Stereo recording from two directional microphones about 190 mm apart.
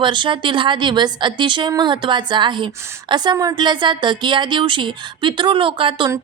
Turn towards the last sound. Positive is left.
turn(degrees=-25)  # may be behind; listen again after turning